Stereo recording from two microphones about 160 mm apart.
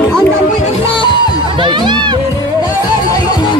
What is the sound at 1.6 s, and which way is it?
Music, 30° right (ahead or behind).